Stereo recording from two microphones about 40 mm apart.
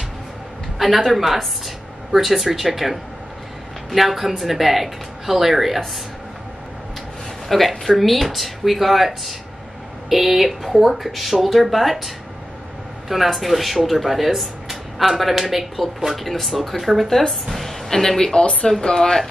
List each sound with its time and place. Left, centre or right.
0.7 s speech: centre
7.4 s speech: centre
13.1 s speech: centre
18.4 s speech: left
18.7 s speech: centre